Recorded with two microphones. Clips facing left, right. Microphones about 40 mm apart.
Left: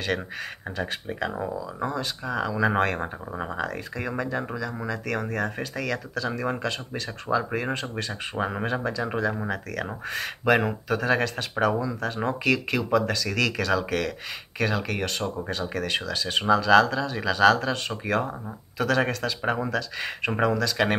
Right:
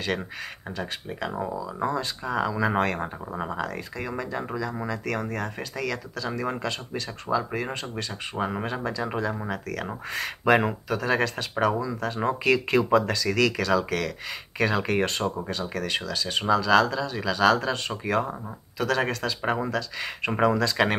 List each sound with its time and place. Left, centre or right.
0.7 s speech: centre
14.8 s speech: centre
15.4 s speech: centre
20.5 s speech: centre